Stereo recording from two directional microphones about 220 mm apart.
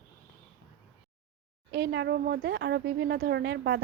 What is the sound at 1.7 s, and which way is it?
A woman's voice, 50° right (ahead or behind).